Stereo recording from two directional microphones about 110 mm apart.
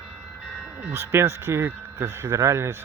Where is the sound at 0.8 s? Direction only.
20° right (ahead or behind).